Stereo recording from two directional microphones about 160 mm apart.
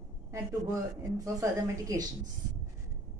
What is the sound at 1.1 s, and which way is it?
Speech, 20° right (ahead or behind).